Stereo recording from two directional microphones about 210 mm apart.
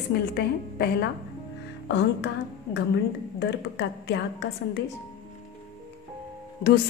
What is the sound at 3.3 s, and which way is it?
A woman's voice, 55° left (ahead or behind).